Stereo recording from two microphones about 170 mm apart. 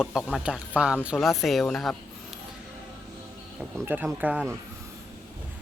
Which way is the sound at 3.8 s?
10° right (ahead or behind).